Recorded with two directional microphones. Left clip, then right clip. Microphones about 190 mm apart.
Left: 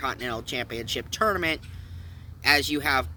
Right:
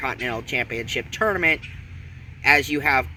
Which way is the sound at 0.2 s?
25° left (ahead or behind).